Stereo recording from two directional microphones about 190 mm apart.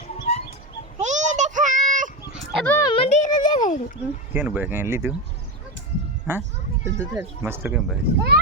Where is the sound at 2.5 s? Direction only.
5° left (ahead or behind).